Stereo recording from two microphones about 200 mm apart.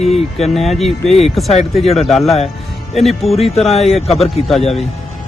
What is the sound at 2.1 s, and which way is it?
A man's voice, centre (ahead or behind).